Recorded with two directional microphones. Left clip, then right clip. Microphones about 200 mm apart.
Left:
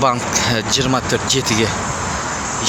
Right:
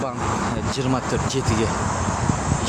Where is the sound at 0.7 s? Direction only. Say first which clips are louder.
Left 6 dB; 5° left (ahead or behind).